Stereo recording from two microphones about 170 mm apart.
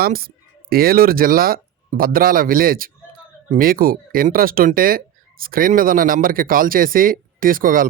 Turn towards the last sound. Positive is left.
turn(degrees=-55)  # may be behind; listen again after turning